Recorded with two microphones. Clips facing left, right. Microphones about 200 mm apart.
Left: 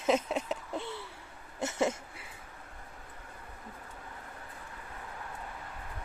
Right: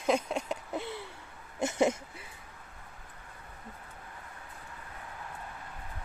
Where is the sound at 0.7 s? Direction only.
15° right (ahead or behind).